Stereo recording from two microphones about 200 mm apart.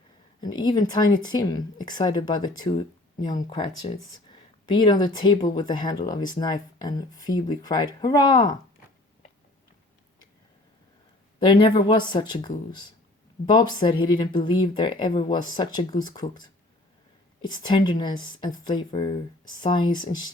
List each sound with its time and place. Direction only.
0.4 s speech: 20° left (ahead or behind)
11.3 s speech: 25° left (ahead or behind)
17.4 s speech: 20° left (ahead or behind)